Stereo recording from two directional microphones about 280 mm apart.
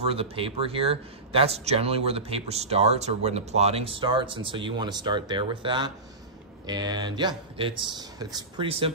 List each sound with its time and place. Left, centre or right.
0.1 s speech: centre